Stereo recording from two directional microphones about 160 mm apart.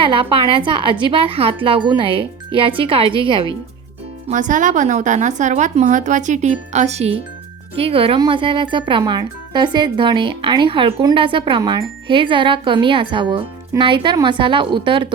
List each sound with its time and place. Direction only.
0.0 s a woman's voice: 35° right (ahead or behind)
4.3 s a woman's voice: 50° right (ahead or behind); by 15.0 s 30° right (ahead or behind)